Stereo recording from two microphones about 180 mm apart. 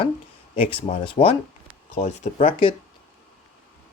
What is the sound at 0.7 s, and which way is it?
Speech, 30° left (ahead or behind).